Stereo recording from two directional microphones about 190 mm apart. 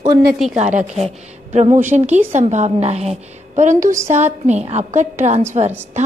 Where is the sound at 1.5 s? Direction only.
40° right (ahead or behind).